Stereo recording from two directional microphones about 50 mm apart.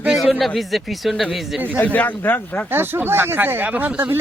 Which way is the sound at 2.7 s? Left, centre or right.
Right.